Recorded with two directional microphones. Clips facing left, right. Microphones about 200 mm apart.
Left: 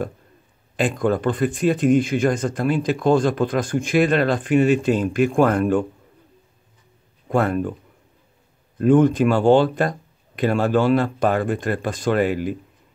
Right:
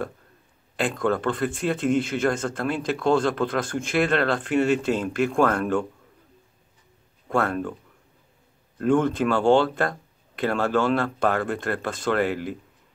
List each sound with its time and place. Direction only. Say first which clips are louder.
0.7 s speech: left 3 dB; 15° left (ahead or behind)
7.2 s speech: left 4 dB; 15° left (ahead or behind)
8.7 s speech: left 6 dB; 15° left (ahead or behind)